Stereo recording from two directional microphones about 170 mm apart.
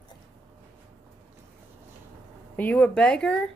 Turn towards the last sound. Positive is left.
turn(degrees=5)  # may be behind; listen again after turning